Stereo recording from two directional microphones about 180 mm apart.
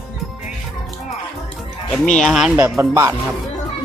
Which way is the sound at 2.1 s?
Centre (ahead or behind).